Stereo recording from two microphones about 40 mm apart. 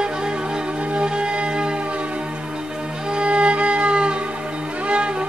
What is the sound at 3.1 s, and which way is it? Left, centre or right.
Music, right.